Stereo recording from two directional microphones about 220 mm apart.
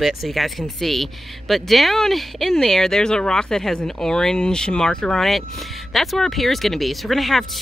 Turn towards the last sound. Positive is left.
turn(degrees=0)  # may be behind; listen again after turning